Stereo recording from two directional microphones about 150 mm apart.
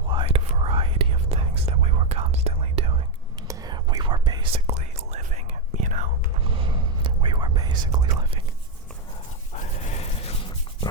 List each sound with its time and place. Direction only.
0.1 s whispering: 35° right (ahead or behind)
3.4 s whispering: 25° right (ahead or behind)
4.6 s whispering: 45° right (ahead or behind)
6.4 s whispering: 35° right (ahead or behind)
9.6 s a sound: 45° left (ahead or behind)